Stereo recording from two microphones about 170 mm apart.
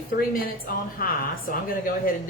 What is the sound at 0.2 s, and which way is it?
A woman's voice, 60° left (ahead or behind).